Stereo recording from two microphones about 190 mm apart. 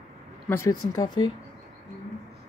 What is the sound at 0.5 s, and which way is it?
Speech, 15° left (ahead or behind).